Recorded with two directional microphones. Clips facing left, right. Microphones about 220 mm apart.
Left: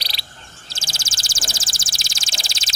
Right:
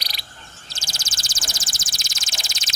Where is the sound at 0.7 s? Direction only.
30° left (ahead or behind).